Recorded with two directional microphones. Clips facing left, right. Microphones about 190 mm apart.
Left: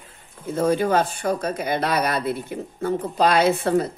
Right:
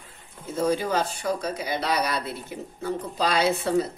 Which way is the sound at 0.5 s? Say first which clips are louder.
Left 4 dB; 55° left (ahead or behind).